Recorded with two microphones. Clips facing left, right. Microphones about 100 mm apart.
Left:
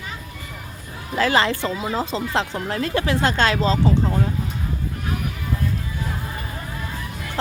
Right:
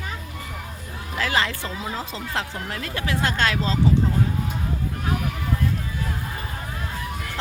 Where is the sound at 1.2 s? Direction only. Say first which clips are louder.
Left 6 dB; 35° left (ahead or behind).